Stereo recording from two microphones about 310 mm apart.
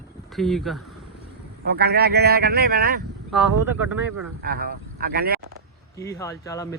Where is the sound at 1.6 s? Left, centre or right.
Right.